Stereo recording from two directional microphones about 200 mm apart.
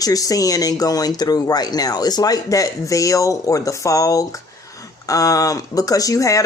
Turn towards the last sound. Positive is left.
turn(degrees=15)  # may be behind; listen again after turning